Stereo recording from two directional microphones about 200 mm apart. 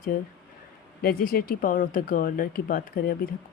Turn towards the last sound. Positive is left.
turn(degrees=45)  # may be behind; listen again after turning